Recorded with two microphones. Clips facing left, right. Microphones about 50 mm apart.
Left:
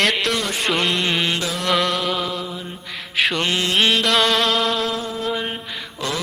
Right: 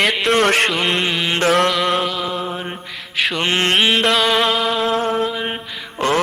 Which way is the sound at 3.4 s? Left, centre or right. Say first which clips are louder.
Right 4 dB; right.